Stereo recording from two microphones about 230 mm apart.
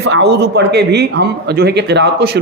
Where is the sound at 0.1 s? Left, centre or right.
Right.